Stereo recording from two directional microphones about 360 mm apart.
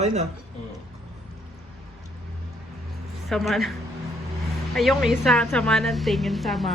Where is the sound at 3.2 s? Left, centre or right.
Centre.